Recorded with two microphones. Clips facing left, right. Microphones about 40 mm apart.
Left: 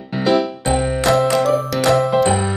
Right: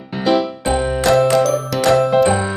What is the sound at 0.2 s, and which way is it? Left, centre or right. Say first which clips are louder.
Music: even; centre.